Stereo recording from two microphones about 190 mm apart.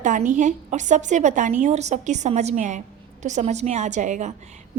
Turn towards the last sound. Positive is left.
turn(degrees=-40)  # may be behind; listen again after turning